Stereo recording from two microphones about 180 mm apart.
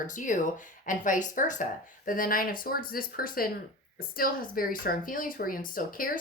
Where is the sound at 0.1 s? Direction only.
45° left (ahead or behind).